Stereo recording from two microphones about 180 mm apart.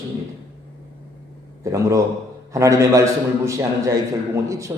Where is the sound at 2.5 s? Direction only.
15° right (ahead or behind).